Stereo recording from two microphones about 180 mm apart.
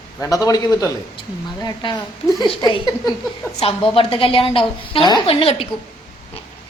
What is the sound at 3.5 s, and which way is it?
A woman's voice, 30° left (ahead or behind).